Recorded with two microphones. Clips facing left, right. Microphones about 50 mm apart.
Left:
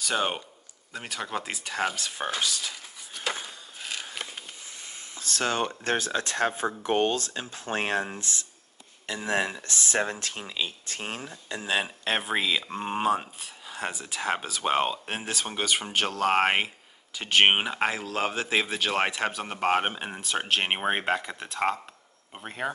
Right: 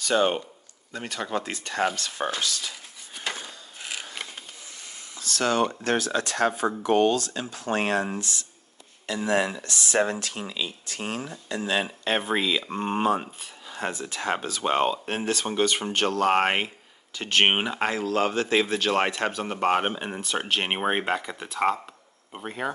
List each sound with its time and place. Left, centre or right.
0.0 s speech: centre
3.4 s a sound: centre
5.4 s speech: centre
5.9 s speech: left
9.9 s speech: right
10.5 s speech: left
11.7 s speech: centre